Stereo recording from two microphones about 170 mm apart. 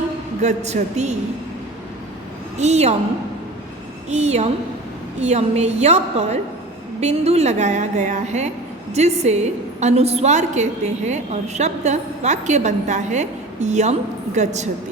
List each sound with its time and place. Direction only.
0.4 s a woman's voice: 40° right (ahead or behind)
2.6 s a woman's voice: 40° right (ahead or behind)
4.1 s a woman's voice: 40° right (ahead or behind)